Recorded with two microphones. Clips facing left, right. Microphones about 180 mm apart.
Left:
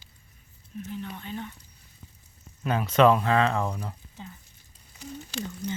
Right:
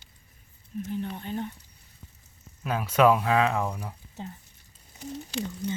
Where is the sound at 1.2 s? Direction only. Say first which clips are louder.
Right 4 dB; 45° right (ahead or behind).